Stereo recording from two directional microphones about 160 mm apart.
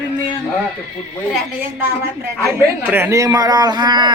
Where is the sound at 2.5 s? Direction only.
15° right (ahead or behind).